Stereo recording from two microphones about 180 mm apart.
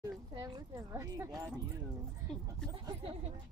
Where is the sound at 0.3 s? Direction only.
20° right (ahead or behind).